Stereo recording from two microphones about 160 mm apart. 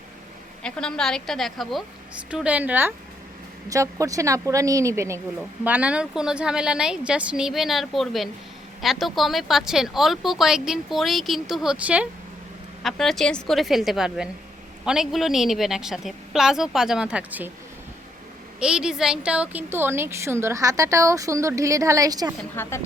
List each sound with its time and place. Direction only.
0.6 s a woman's voice: 5° left (ahead or behind)
18.6 s a woman's voice: 5° right (ahead or behind); by 22.4 s 25° right (ahead or behind)
22.5 s a woman's voice: 15° left (ahead or behind)